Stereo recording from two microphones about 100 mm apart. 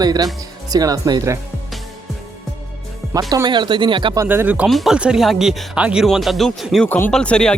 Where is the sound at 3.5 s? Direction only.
50° right (ahead or behind).